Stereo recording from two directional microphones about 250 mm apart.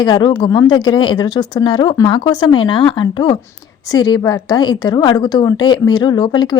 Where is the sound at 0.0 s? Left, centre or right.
Centre.